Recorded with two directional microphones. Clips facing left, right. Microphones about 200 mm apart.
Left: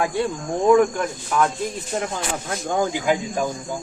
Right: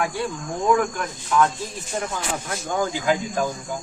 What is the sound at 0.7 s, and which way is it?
Speech, 25° left (ahead or behind).